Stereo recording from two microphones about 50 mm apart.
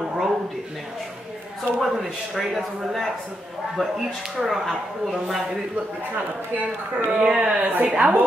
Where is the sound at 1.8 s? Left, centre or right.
Centre.